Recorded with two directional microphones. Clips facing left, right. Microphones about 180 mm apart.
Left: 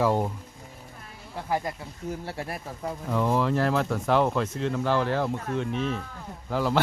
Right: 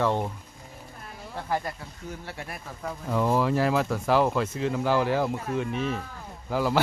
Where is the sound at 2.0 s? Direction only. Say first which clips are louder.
Left 5 dB; 30° left (ahead or behind).